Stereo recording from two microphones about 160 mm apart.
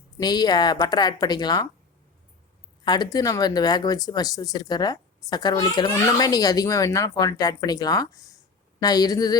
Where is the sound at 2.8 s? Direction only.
25° left (ahead or behind).